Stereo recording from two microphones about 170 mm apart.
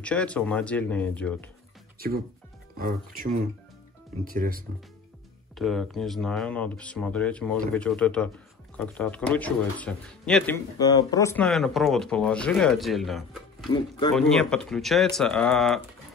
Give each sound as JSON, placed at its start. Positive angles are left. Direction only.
{"t": 0.0, "sound": "speech", "side_deg": 5}
{"t": 2.0, "sound": "speech", "side_deg": -60}
{"t": 5.6, "sound": "speech", "side_deg": 0}
{"t": 10.8, "sound": "speech", "side_deg": 25}
{"t": 11.3, "sound": "speech", "side_deg": 0}
{"t": 13.7, "sound": "speech", "side_deg": 30}
{"t": 14.1, "sound": "speech", "side_deg": 0}